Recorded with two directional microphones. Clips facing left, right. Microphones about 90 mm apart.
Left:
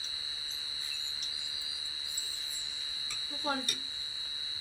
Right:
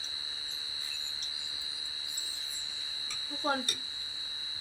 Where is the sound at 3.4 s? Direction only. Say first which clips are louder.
Right 3 dB; 25° right (ahead or behind).